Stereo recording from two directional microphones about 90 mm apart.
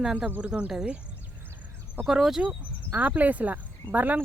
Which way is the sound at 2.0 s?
5° right (ahead or behind).